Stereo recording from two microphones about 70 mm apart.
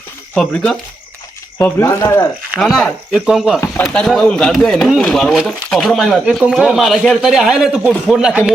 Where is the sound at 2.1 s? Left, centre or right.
Left.